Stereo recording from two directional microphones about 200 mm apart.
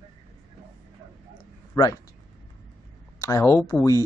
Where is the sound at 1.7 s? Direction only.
20° left (ahead or behind).